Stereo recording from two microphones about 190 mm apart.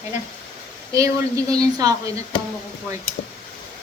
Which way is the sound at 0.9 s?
15° right (ahead or behind).